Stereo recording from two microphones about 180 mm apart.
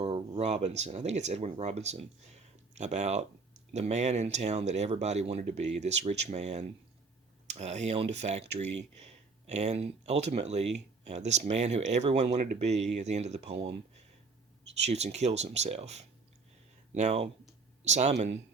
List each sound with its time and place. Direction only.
0.0 s speech: 35° right (ahead or behind)
14.8 s speech: 35° right (ahead or behind)